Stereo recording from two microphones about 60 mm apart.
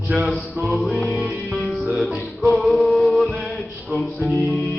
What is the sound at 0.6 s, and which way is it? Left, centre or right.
Music, right.